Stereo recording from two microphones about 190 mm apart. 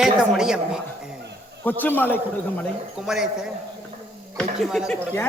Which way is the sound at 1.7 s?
10° left (ahead or behind).